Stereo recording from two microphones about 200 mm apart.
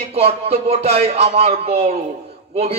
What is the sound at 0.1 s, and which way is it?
Speech, 30° right (ahead or behind).